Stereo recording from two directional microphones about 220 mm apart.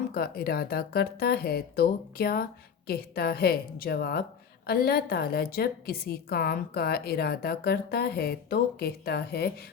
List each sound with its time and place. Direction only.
0.1 s speech: 45° left (ahead or behind)